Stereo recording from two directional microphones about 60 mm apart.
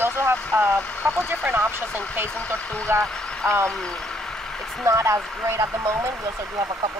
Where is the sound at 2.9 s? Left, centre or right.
Right.